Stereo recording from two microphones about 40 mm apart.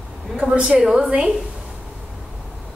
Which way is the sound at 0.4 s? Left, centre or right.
Right.